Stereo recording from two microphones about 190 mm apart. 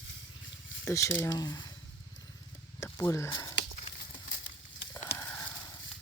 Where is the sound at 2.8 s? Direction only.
15° left (ahead or behind).